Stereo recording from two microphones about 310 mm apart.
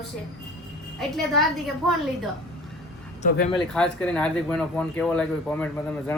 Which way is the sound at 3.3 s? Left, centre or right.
Centre.